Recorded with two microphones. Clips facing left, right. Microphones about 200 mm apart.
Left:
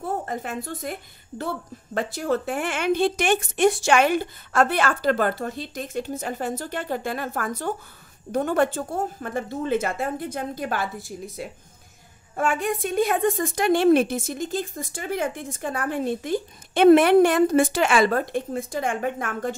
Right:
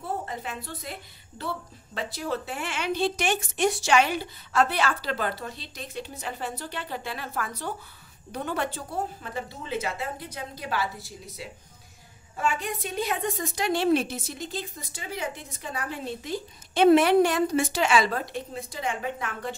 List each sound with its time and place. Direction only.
0.0 s a woman's voice: 50° left (ahead or behind)
2.0 s a woman's voice: 50° left (ahead or behind)